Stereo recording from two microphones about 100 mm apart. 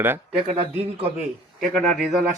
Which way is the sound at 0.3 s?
65° right (ahead or behind).